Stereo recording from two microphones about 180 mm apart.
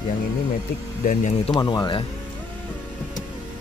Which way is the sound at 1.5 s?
25° left (ahead or behind).